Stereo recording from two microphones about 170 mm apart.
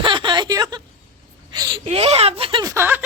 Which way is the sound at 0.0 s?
30° right (ahead or behind).